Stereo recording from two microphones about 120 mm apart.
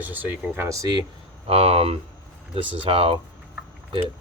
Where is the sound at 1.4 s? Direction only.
55° right (ahead or behind).